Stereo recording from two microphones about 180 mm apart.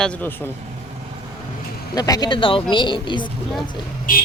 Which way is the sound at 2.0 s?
20° left (ahead or behind).